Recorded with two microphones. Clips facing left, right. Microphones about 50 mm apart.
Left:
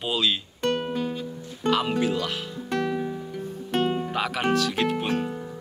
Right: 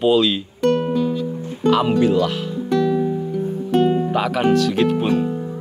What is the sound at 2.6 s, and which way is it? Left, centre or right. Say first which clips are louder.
Music: right 8 dB; left.